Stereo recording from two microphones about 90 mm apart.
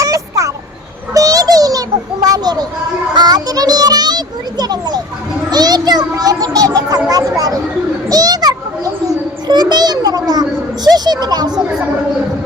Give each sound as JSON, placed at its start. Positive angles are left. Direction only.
{"t": 0.0, "sound": "a sound", "side_deg": -35}
{"t": 3.2, "sound": "children playing", "side_deg": -50}
{"t": 5.5, "sound": "a child's voice", "side_deg": -50}
{"t": 8.1, "sound": "children playing", "side_deg": -45}
{"t": 9.5, "sound": "a child's voice", "side_deg": -50}